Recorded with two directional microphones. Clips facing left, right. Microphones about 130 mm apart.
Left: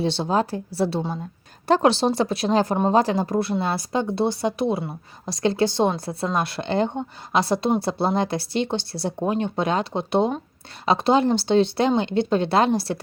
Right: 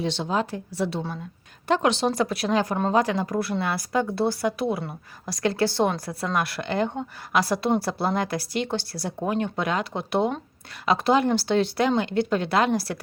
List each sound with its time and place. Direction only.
0.0 s speech: 35° left (ahead or behind)